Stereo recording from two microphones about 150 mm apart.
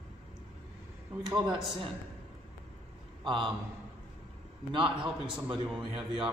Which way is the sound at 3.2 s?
30° right (ahead or behind).